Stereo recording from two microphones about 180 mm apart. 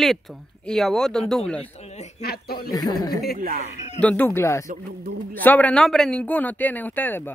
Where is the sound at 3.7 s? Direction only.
40° left (ahead or behind).